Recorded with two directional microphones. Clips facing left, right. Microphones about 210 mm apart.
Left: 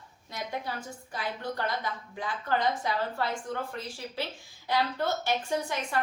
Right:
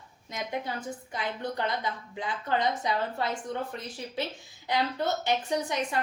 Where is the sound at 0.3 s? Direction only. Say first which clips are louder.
Right 2 dB; 20° right (ahead or behind).